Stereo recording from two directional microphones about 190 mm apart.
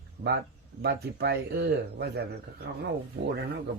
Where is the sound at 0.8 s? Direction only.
55° right (ahead or behind).